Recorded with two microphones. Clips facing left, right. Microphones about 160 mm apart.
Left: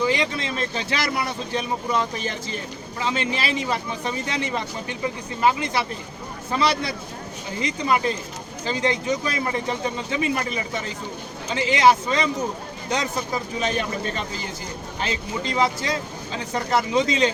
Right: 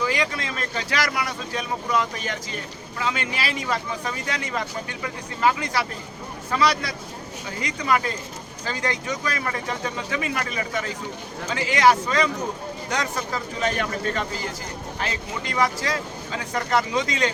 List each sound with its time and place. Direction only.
0.0 s speech: 25° left (ahead or behind)